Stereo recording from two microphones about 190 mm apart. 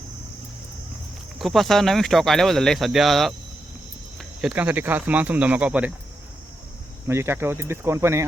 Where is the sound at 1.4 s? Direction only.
Centre (ahead or behind).